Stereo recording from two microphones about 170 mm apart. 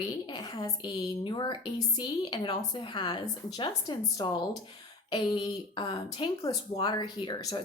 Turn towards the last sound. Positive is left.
turn(degrees=25)  # may be behind; listen again after turning